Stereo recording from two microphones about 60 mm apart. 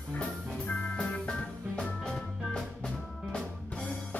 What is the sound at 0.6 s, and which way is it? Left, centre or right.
Music, left.